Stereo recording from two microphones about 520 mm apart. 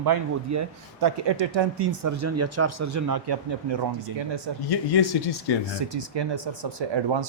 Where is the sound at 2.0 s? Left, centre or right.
Right.